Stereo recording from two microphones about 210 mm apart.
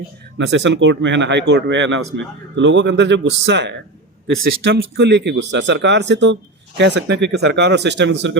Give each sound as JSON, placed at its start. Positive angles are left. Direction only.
{"t": 0.3, "sound": "speech", "side_deg": -60}